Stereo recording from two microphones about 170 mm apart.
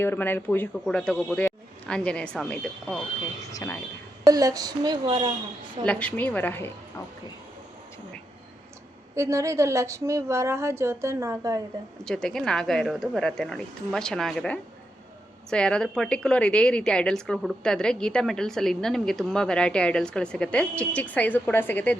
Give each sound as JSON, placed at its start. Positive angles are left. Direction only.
{"t": 0.0, "sound": "a man's voice", "side_deg": 10}
{"t": 3.5, "sound": "speech", "side_deg": 20}
{"t": 4.3, "sound": "speech", "side_deg": -20}
{"t": 5.8, "sound": "a man's voice", "side_deg": 5}
{"t": 9.1, "sound": "a woman's voice", "side_deg": -15}
{"t": 12.0, "sound": "a woman's voice", "side_deg": 5}